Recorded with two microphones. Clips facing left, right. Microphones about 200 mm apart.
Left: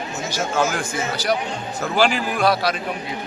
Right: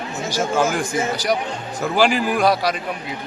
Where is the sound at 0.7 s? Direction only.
15° right (ahead or behind).